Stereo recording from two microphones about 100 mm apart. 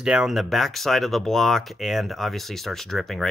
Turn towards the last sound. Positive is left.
turn(degrees=5)  # may be behind; listen again after turning